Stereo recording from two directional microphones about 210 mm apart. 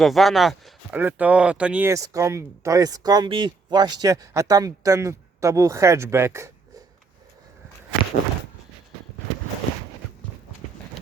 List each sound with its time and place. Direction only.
0.0 s speech: centre (ahead or behind)
10.6 s run: 35° left (ahead or behind)